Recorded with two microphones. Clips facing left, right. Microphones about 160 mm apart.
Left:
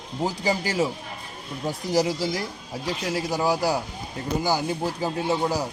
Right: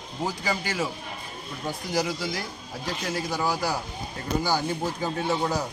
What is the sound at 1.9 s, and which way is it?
Speech, 35° left (ahead or behind).